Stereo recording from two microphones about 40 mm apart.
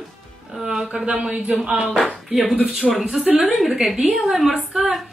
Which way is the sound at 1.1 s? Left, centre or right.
Right.